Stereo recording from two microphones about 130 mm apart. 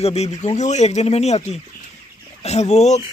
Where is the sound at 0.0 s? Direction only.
55° left (ahead or behind).